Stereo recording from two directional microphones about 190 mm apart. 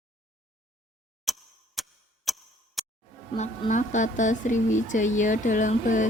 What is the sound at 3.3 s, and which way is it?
Speech, 40° left (ahead or behind).